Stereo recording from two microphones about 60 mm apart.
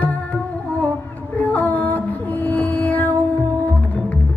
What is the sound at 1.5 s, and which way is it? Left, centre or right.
Music, left.